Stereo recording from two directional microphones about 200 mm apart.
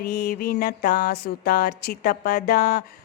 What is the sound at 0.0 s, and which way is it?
Speech, 50° left (ahead or behind).